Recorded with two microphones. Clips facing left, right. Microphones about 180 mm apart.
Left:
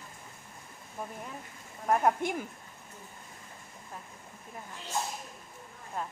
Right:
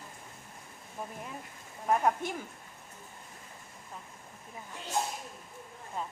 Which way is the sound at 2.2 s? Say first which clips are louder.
Left 4 dB; 15° left (ahead or behind).